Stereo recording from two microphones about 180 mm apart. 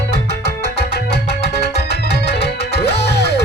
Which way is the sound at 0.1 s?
70° left (ahead or behind).